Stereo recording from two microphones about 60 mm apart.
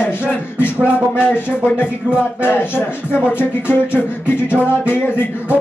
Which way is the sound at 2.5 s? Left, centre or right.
Left.